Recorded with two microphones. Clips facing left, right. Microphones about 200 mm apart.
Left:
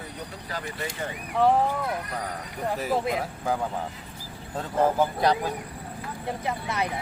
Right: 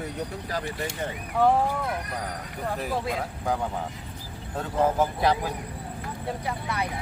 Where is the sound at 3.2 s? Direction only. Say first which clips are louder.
Even; centre (ahead or behind).